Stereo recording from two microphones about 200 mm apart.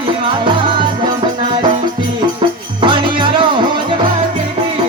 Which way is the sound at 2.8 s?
25° right (ahead or behind).